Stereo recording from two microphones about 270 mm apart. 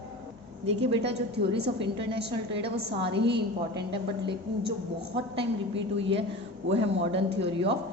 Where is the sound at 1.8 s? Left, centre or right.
Centre.